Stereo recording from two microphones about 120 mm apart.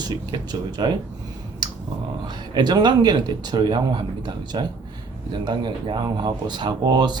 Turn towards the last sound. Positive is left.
turn(degrees=-35)  # may be behind; listen again after turning